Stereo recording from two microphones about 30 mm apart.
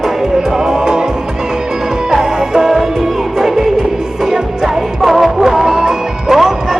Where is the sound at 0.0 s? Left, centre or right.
Centre.